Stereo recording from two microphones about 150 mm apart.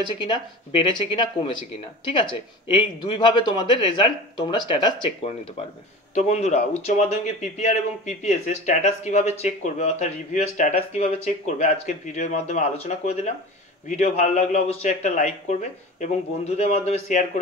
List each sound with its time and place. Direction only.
0.2 s speech: 35° left (ahead or behind)
6.1 s speech: 50° left (ahead or behind)